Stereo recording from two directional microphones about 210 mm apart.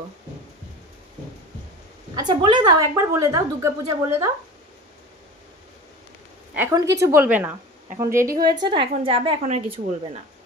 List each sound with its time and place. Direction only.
2.1 s a woman's voice: 20° right (ahead or behind)
6.5 s a woman's voice: 15° right (ahead or behind)